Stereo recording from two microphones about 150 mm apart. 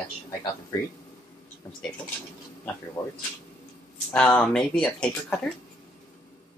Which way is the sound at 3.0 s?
25° left (ahead or behind).